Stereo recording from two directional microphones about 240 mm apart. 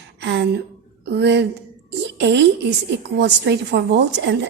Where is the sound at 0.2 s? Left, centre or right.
Right.